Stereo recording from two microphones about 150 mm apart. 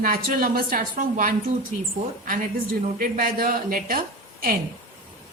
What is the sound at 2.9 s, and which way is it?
A woman's voice, 65° right (ahead or behind).